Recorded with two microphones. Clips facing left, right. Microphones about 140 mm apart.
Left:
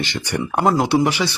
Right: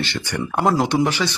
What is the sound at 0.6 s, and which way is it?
Speech, 5° left (ahead or behind).